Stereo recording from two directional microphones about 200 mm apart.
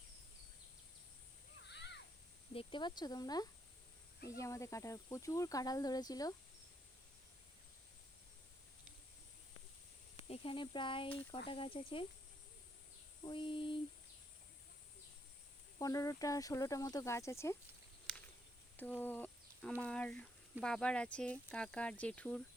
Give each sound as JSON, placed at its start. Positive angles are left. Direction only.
{"t": 1.7, "sound": "a sound", "side_deg": 60}
{"t": 2.5, "sound": "speech", "side_deg": 25}
{"t": 10.2, "sound": "speech", "side_deg": 30}
{"t": 13.2, "sound": "speech", "side_deg": 25}
{"t": 15.8, "sound": "speech", "side_deg": 15}
{"t": 18.8, "sound": "speech", "side_deg": 10}